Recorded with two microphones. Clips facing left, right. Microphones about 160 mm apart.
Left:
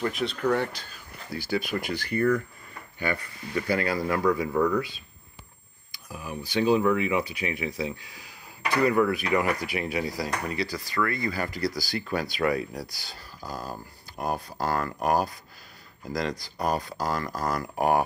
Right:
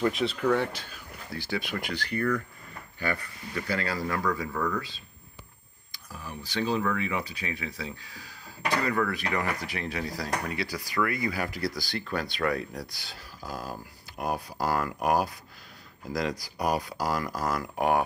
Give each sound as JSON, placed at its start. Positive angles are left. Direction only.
{"t": 0.1, "sound": "speech", "side_deg": 0}
{"t": 1.8, "sound": "speech", "side_deg": 45}
{"t": 3.0, "sound": "speech", "side_deg": 20}
{"t": 4.5, "sound": "speech", "side_deg": 25}
{"t": 4.7, "sound": "speech", "side_deg": 15}
{"t": 6.0, "sound": "speech", "side_deg": 10}
{"t": 9.1, "sound": "speech", "side_deg": 5}